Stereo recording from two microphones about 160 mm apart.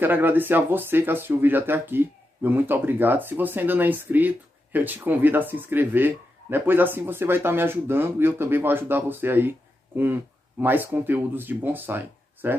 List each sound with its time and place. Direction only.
0.0 s speech: 10° right (ahead or behind)